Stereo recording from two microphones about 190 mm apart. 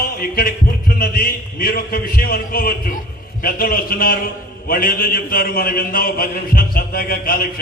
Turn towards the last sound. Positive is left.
turn(degrees=50)  # may be behind; listen again after turning